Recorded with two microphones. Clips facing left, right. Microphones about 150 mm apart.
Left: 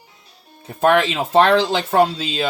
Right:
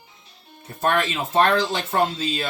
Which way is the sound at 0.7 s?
85° left.